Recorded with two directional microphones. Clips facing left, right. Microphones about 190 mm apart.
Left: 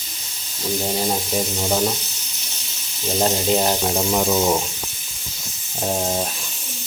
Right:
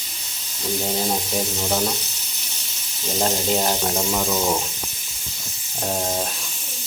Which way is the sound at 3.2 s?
5° left (ahead or behind).